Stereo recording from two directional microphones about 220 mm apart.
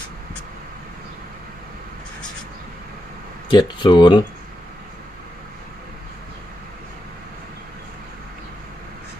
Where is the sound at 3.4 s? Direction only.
20° left (ahead or behind).